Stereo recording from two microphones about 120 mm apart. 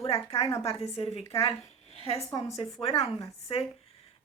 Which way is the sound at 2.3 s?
35° left (ahead or behind).